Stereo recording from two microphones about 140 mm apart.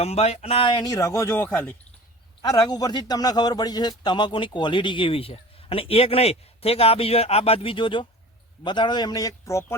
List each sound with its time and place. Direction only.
0.0 s speech: 45° left (ahead or behind); by 1.7 s 15° left (ahead or behind)
2.4 s a man's voice: 25° left (ahead or behind)